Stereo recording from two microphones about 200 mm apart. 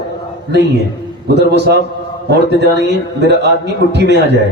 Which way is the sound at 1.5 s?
55° right (ahead or behind).